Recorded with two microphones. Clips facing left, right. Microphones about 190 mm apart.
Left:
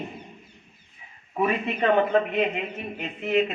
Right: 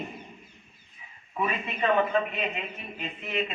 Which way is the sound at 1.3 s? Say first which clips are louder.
Left 6 dB; 55° left (ahead or behind).